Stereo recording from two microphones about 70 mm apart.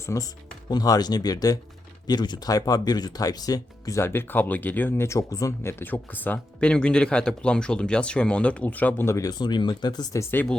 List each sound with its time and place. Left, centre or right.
0.0 s speech: left
0.7 s speech: left
2.0 s speech: left
4.0 s speech: left
5.0 s speech: left
5.6 s speech: left
6.6 s speech: centre
9.0 s speech: left
9.4 s speech: left